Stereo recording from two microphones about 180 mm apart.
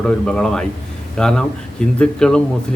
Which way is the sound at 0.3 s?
5° left (ahead or behind).